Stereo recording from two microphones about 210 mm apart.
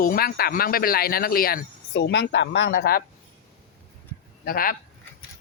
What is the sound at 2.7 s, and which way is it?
Speech, 45° left (ahead or behind).